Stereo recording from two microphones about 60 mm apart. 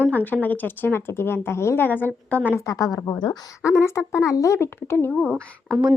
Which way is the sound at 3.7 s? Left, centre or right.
Left.